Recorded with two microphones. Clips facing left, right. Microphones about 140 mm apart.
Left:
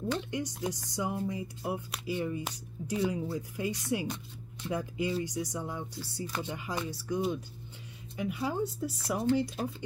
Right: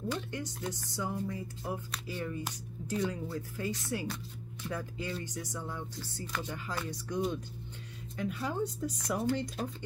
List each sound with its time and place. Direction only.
0.3 s speech: 15° left (ahead or behind)
6.9 s speech: 5° left (ahead or behind)